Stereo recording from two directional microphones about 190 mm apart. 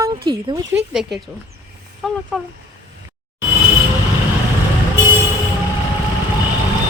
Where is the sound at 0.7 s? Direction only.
Centre (ahead or behind).